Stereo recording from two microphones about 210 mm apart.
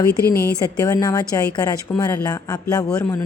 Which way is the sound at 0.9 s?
15° left (ahead or behind).